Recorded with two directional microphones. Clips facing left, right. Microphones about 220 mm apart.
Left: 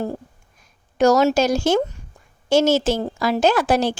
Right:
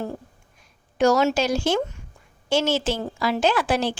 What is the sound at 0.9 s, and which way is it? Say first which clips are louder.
A woman's voice: left 4 dB; 40° left (ahead or behind).